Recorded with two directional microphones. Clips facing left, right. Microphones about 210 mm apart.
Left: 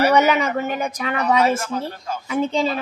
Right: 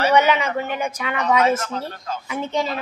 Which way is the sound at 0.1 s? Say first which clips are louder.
Left 1 dB; 40° left (ahead or behind).